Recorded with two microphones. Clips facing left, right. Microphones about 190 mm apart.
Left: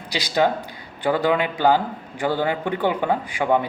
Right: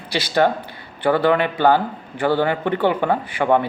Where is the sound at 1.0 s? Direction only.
10° left (ahead or behind).